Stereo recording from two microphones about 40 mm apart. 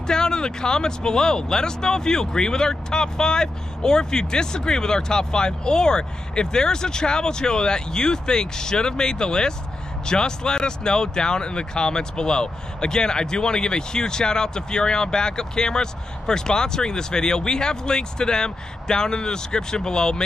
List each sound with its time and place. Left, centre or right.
0.0 s speech: centre